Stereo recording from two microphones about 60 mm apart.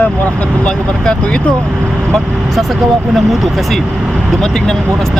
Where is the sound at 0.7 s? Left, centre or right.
Centre.